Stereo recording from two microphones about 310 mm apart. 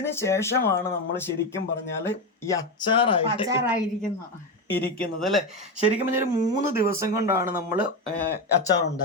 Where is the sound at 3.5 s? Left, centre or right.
Centre.